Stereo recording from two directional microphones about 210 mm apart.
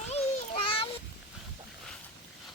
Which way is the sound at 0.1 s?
30° left (ahead or behind).